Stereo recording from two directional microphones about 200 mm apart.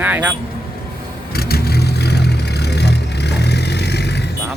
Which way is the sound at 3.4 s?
55° left (ahead or behind).